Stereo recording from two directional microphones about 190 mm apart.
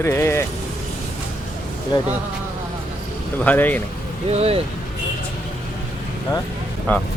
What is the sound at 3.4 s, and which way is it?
Speech, 10° left (ahead or behind).